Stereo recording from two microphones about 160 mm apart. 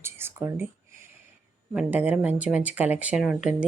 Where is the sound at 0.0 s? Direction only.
15° right (ahead or behind).